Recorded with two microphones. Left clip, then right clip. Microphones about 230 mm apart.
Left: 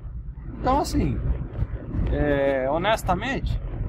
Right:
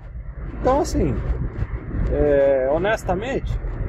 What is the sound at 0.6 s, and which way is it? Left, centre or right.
Speech, left.